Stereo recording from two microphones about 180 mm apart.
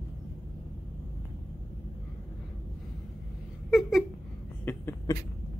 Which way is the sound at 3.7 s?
Centre (ahead or behind).